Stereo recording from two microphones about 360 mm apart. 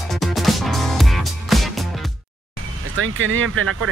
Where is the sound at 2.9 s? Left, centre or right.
Right.